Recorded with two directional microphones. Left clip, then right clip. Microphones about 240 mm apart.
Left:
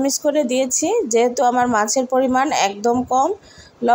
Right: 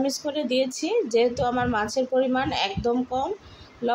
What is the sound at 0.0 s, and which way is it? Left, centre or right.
A woman's voice, left.